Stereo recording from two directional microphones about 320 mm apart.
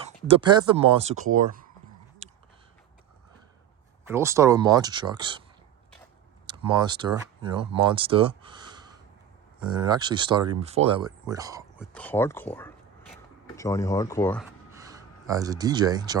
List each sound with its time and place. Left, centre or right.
0.3 s speech: centre
4.0 s speech: centre
6.5 s speech: centre
11.9 s speech: centre
14.7 s a sound: centre